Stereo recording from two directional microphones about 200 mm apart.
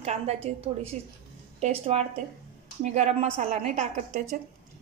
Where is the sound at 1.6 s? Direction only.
30° right (ahead or behind).